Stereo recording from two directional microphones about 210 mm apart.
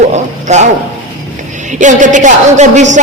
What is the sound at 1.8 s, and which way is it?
A man's voice, 35° right (ahead or behind).